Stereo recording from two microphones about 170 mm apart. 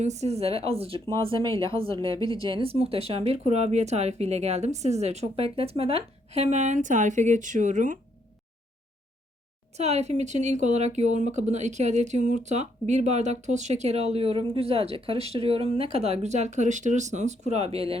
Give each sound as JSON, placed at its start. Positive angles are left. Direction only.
{"t": 0.0, "sound": "speech", "side_deg": -40}
{"t": 2.0, "sound": "a woman's voice", "side_deg": 20}
{"t": 2.5, "sound": "speech", "side_deg": -35}
{"t": 9.7, "sound": "speech", "side_deg": -40}